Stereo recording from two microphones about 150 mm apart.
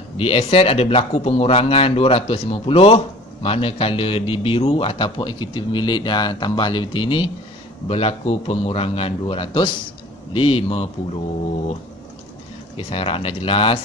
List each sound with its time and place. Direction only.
0.2 s a man's voice: 40° left (ahead or behind)
12.7 s a man's voice: 40° left (ahead or behind)